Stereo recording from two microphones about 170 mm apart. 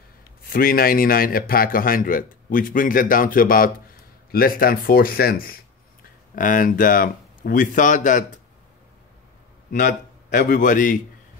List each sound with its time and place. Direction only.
0.5 s a man's voice: 60° left (ahead or behind)
9.7 s a man's voice: 50° left (ahead or behind)